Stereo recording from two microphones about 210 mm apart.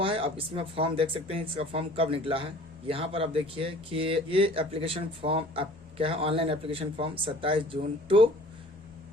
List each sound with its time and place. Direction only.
0.0 s speech: 25° right (ahead or behind)